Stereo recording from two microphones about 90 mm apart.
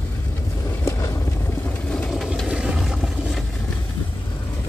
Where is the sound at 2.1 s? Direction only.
Centre (ahead or behind).